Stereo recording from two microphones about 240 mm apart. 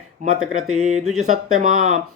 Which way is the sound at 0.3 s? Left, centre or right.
Centre.